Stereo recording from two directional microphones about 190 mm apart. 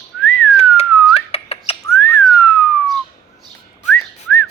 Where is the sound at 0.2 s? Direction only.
10° left (ahead or behind).